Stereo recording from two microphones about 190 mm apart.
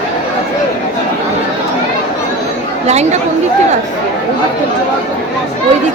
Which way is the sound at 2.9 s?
35° right (ahead or behind).